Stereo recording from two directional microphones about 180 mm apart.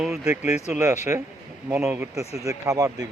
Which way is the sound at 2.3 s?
15° right (ahead or behind).